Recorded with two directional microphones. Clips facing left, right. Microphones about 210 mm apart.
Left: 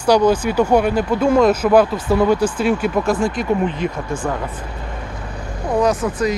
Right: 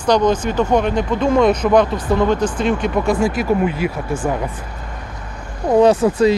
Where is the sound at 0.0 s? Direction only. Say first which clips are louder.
Left 1 dB; 10° left (ahead or behind); by 4.0 s 5° right (ahead or behind).